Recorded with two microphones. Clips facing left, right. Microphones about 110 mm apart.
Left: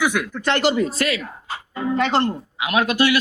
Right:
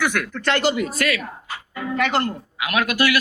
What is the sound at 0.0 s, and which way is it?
Speech, 10° left (ahead or behind).